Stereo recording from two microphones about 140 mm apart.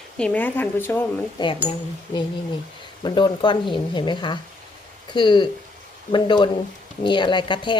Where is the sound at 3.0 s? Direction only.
35° left (ahead or behind).